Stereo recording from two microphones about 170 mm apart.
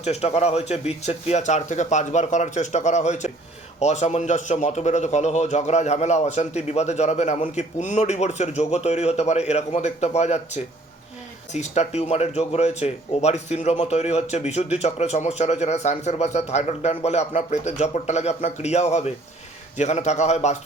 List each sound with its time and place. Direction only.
0.0 s a man's voice: 40° left (ahead or behind)